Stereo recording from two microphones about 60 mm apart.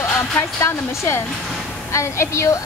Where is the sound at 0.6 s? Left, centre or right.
Left.